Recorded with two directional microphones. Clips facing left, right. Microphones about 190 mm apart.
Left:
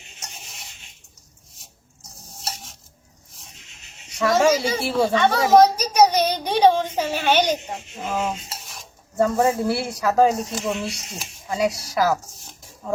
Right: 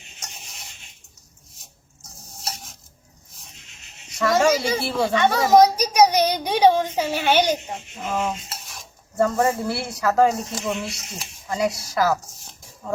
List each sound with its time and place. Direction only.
2.5 s stir: centre (ahead or behind)
4.2 s a sound: 10° left (ahead or behind)
4.5 s speech: 10° left (ahead or behind)
5.1 s a child's voice: 15° right (ahead or behind)
7.7 s stir: 10° left (ahead or behind)
9.1 s speech: 15° left (ahead or behind)